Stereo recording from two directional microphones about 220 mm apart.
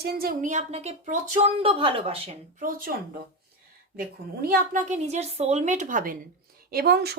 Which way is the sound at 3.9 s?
40° right (ahead or behind).